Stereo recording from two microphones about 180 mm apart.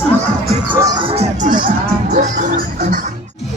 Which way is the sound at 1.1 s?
45° right (ahead or behind).